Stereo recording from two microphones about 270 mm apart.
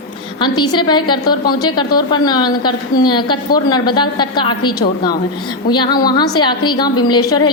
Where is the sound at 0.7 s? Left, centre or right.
Centre.